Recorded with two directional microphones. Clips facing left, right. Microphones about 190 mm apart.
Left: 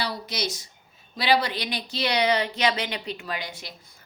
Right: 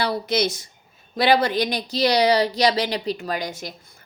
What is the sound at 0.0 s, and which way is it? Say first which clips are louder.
A woman's voice: right 8 dB; 55° right (ahead or behind).